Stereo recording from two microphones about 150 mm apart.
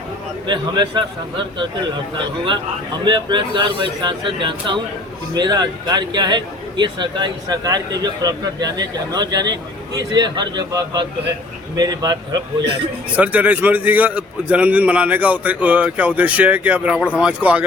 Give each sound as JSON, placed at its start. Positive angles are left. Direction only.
{"t": 0.4, "sound": "speech", "side_deg": -30}
{"t": 2.1, "sound": "speech", "side_deg": -35}
{"t": 13.1, "sound": "a man's voice", "side_deg": -10}